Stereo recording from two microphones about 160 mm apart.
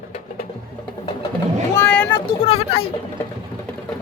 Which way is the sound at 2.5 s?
40° left (ahead or behind).